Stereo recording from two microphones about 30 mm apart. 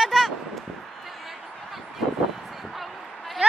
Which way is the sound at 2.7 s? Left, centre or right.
Centre.